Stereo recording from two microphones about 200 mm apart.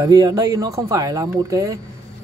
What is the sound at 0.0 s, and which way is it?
Speech, 15° right (ahead or behind).